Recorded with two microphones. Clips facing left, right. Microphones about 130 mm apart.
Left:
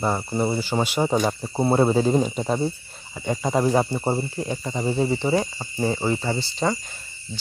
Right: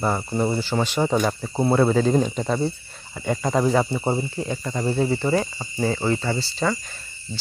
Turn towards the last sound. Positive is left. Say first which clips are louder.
# even
turn(degrees=20)  # may be behind; listen again after turning